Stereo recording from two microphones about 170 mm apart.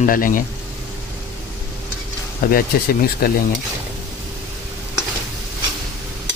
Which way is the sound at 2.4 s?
60° left (ahead or behind).